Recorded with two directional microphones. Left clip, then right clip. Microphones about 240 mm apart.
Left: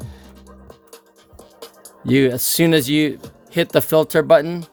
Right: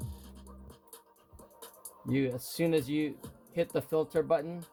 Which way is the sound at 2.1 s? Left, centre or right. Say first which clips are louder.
Left 16 dB; left.